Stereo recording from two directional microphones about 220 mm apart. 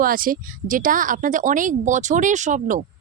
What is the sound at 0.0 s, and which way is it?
A woman's voice, 40° right (ahead or behind).